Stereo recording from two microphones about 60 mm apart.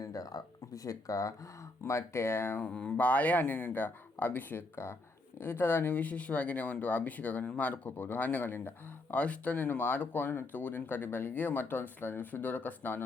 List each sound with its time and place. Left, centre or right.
0.0 s speech: left
1.8 s speech: left
2.6 s speech: left